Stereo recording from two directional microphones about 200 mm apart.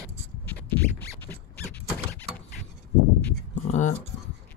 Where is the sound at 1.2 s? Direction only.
10° left (ahead or behind).